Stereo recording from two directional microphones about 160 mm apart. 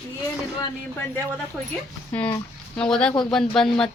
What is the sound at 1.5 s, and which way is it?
Speech, 5° right (ahead or behind).